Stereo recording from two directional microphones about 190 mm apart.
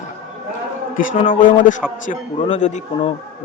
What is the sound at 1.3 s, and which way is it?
A man's voice, 45° left (ahead or behind).